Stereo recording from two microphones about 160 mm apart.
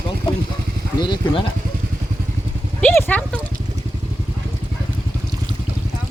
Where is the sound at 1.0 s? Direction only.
30° left (ahead or behind).